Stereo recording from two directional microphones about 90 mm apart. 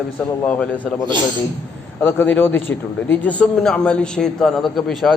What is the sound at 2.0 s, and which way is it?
A man's voice, 25° left (ahead or behind).